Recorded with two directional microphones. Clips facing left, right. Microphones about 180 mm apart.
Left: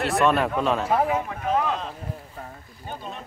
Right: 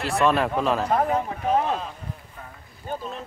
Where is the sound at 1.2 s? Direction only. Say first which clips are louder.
Right 1 dB; 35° right (ahead or behind).